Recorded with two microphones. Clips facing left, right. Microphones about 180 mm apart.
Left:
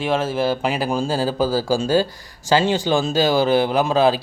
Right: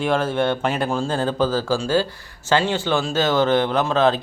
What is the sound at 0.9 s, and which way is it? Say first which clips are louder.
Speech: left 1 dB; 15° left (ahead or behind).